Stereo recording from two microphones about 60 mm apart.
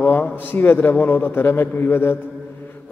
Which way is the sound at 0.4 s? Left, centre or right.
Left.